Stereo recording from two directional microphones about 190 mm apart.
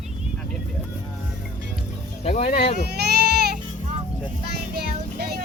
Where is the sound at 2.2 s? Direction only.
35° left (ahead or behind).